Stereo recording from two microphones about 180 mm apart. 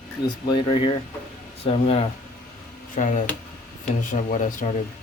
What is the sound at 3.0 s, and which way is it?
Speech, 45° left (ahead or behind).